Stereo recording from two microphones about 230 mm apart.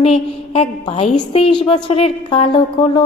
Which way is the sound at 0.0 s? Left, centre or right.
Left.